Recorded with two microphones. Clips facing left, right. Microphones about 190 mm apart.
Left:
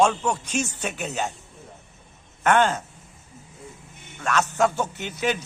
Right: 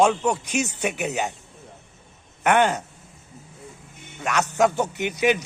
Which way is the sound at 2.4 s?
15° right (ahead or behind).